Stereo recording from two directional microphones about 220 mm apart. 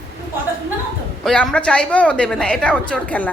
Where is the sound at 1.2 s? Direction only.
5° left (ahead or behind).